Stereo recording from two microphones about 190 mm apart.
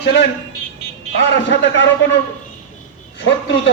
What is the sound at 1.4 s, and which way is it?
Speech, 75° left (ahead or behind).